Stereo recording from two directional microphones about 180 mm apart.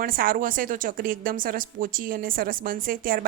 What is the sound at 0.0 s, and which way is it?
A woman's voice, 50° right (ahead or behind).